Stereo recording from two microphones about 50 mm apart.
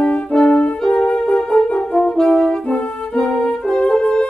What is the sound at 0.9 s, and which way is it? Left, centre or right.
Music, left.